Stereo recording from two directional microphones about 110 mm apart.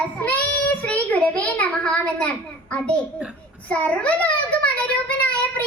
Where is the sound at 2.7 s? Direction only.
10° left (ahead or behind).